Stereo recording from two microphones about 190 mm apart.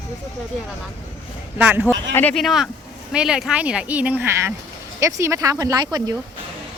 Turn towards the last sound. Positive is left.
turn(degrees=-20)  # may be behind; listen again after turning